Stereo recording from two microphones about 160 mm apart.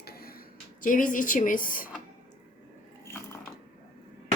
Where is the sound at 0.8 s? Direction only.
55° left (ahead or behind).